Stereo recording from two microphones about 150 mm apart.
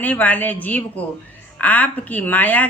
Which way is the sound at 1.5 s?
10° left (ahead or behind).